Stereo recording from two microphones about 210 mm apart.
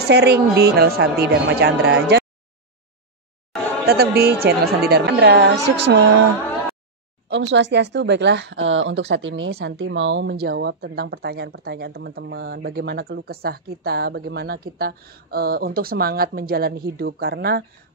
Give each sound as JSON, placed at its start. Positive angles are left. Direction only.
{"t": 0.0, "sound": "speech", "side_deg": -50}
{"t": 3.8, "sound": "speech", "side_deg": -50}
{"t": 7.2, "sound": "speech", "side_deg": -65}